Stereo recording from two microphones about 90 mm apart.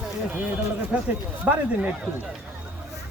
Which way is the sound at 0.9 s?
10° right (ahead or behind).